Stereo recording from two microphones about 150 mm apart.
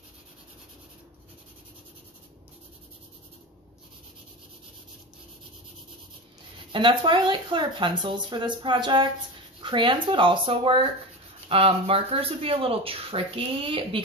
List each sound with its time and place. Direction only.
6.7 s speech: 30° right (ahead or behind)